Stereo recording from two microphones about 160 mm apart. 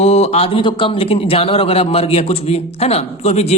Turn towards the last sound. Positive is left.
turn(degrees=40)  # may be behind; listen again after turning